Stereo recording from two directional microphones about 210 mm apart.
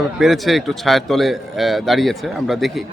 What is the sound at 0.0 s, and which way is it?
A man's voice, centre (ahead or behind).